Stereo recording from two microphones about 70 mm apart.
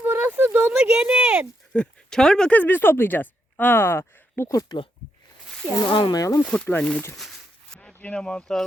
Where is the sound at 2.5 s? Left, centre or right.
Left.